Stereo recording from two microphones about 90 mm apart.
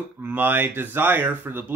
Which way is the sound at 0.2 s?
20° right (ahead or behind).